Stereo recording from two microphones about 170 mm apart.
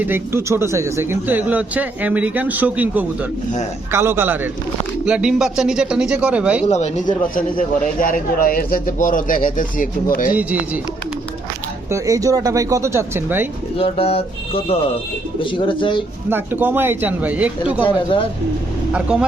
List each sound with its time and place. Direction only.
0.0 s speech: 15° right (ahead or behind)
6.7 s speech: 40° left (ahead or behind)
11.9 s speech: 20° right (ahead or behind)
13.7 s speech: 35° left (ahead or behind)
16.3 s speech: 10° right (ahead or behind)
17.8 s speech: 30° left (ahead or behind)
18.9 s speech: 5° right (ahead or behind)